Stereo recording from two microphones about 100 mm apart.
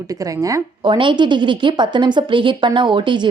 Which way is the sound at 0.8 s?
55° right (ahead or behind).